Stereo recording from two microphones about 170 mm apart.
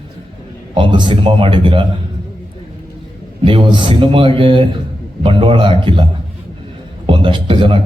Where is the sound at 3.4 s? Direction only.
30° right (ahead or behind).